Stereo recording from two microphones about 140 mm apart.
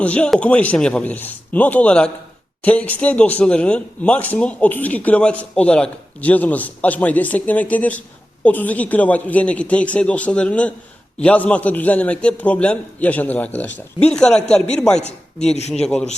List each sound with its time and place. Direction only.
0.0 s a man's voice: 10° left (ahead or behind)
14.9 s speech: 50° left (ahead or behind)
15.7 s a man's voice: 5° left (ahead or behind)